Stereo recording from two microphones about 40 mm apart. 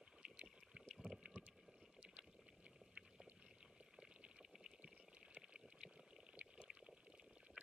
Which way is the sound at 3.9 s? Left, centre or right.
Centre.